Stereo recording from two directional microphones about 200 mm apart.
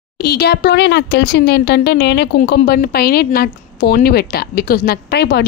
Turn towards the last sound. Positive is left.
turn(degrees=55)  # may be behind; listen again after turning